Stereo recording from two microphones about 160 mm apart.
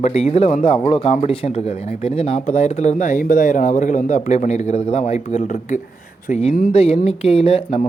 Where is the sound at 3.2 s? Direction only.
55° left (ahead or behind).